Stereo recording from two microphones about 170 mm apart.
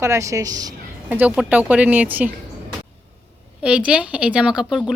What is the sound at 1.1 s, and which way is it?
Speech, 10° right (ahead or behind).